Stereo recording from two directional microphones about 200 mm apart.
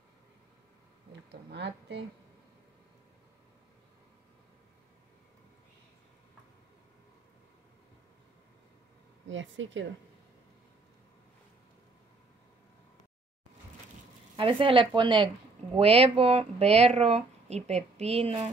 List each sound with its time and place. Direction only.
1.5 s a woman's voice: 60° right (ahead or behind)
9.3 s speech: 70° right (ahead or behind)
14.3 s speech: 25° right (ahead or behind)